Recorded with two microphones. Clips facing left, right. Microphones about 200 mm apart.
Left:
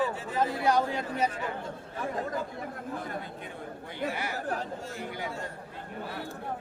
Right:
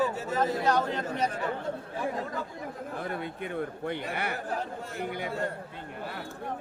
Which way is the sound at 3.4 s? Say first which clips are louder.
Right 8 dB; 60° right (ahead or behind).